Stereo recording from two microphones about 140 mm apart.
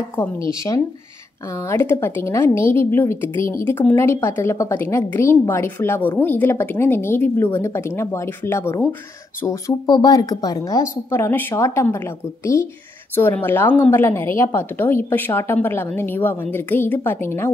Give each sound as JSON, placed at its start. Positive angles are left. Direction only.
{"t": 0.4, "sound": "a woman's voice", "side_deg": 20}
{"t": 13.1, "sound": "a woman's voice", "side_deg": 15}